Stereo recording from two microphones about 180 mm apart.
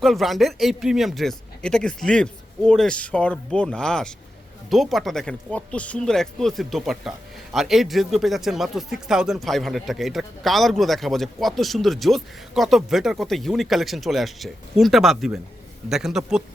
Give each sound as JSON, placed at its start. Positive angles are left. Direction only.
{"t": 0.0, "sound": "speech", "side_deg": 0}